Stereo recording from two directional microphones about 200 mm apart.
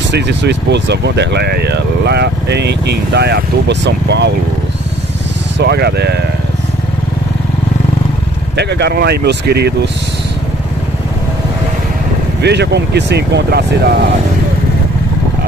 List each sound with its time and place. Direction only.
0.1 s speech: 60° right (ahead or behind)
5.6 s speech: 55° right (ahead or behind)
8.5 s speech: 55° right (ahead or behind)
12.4 s speech: 55° right (ahead or behind)